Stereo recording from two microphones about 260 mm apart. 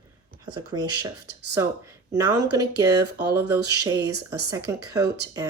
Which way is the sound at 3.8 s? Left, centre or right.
Centre.